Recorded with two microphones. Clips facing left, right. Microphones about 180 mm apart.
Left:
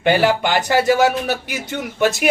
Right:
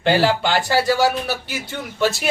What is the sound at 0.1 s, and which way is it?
Speech, 15° left (ahead or behind).